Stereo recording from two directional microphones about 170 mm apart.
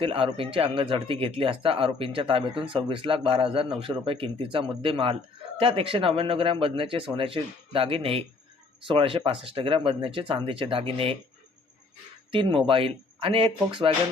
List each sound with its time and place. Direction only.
0.0 s speech: 35° right (ahead or behind)
12.3 s speech: 30° right (ahead or behind)